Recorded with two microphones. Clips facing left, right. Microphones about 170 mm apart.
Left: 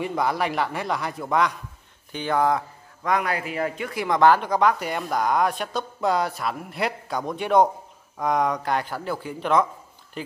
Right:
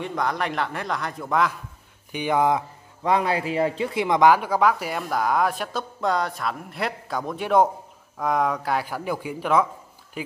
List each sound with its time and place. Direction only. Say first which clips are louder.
0.0 s speech: left 2 dB; 5° left (ahead or behind)
2.1 s speech: right 1 dB; 15° right (ahead or behind)
3.0 s speech: right 2 dB; 30° right (ahead or behind); by 10.3 s 10° right (ahead or behind)